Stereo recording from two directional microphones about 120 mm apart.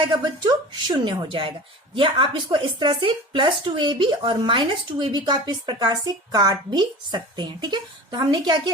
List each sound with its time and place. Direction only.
0.0 s speech: 40° right (ahead or behind)